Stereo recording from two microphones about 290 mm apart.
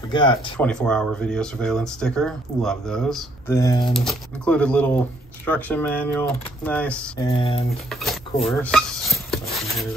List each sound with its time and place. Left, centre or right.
0.1 s speech: centre
0.6 s speech: centre
3.9 s speech: centre
7.2 s speech: centre
7.9 s a sound: centre
8.5 s speech: centre
9.5 s a sound: centre